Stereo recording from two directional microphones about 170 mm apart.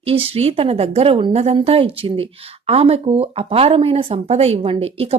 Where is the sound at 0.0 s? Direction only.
35° right (ahead or behind).